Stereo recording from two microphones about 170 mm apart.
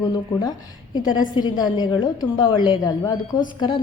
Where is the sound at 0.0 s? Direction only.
25° left (ahead or behind).